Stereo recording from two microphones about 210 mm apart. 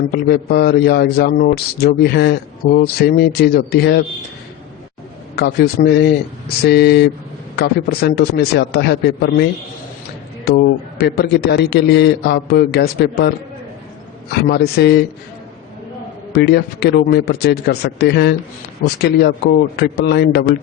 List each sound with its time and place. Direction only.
0.1 s a man's voice: 50° left (ahead or behind)
5.4 s a man's voice: 50° left (ahead or behind)
14.4 s a man's voice: 50° left (ahead or behind)
16.3 s a man's voice: 50° left (ahead or behind)